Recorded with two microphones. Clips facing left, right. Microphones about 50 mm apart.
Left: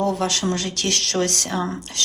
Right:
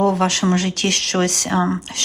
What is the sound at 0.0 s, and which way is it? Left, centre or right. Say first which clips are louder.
Speech: right 5 dB; right.